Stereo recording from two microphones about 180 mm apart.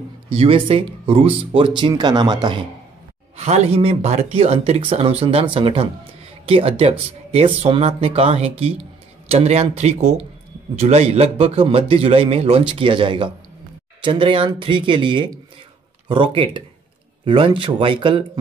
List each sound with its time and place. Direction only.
0.3 s speech: 30° right (ahead or behind)
3.3 s speech: 35° right (ahead or behind)